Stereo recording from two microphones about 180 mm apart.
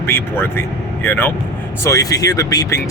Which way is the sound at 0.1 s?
10° left (ahead or behind).